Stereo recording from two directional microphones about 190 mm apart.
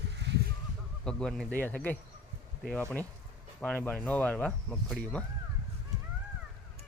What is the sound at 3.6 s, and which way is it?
Speech, 10° left (ahead or behind).